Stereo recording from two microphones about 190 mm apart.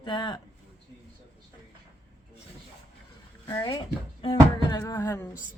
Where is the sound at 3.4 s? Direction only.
20° left (ahead or behind).